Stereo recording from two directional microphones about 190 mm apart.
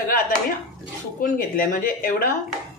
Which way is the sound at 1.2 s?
45° left (ahead or behind).